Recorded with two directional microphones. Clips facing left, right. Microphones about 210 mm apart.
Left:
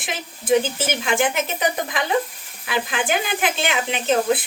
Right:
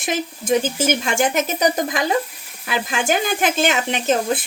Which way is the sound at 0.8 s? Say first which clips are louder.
Right 2 dB; 45° right (ahead or behind).